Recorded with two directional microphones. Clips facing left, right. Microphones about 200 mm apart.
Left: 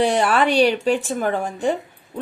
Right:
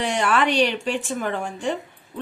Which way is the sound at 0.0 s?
35° left (ahead or behind).